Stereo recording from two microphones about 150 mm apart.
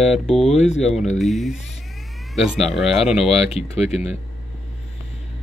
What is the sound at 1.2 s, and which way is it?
Speech, centre (ahead or behind).